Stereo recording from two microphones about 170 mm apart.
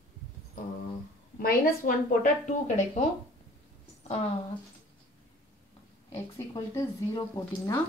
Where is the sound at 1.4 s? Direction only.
55° left (ahead or behind).